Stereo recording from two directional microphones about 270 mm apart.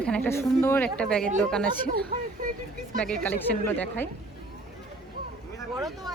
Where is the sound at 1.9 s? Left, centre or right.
Right.